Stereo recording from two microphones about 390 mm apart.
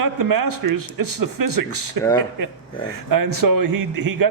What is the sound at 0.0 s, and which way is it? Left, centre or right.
A man's voice, right.